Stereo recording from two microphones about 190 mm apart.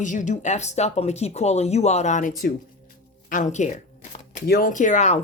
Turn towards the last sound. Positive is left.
turn(degrees=40)  # may be behind; listen again after turning